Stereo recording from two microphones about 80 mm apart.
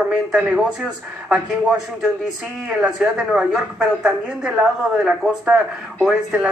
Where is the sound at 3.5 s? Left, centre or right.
Centre.